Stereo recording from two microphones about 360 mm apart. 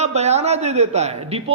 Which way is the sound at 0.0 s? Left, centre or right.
Centre.